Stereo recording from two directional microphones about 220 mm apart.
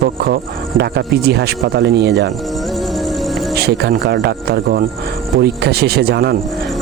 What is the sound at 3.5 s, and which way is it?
Speech, 45° right (ahead or behind).